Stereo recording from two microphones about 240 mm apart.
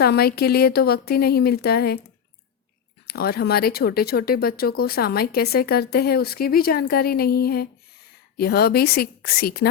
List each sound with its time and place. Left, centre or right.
0.0 s speech: left
3.1 s speech: left